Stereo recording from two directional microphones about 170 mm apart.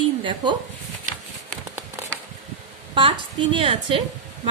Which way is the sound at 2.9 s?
30° right (ahead or behind).